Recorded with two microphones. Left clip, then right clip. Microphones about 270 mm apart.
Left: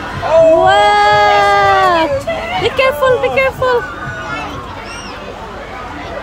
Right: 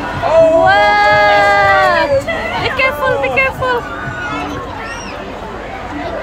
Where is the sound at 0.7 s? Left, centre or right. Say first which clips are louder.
Left 1 dB; left.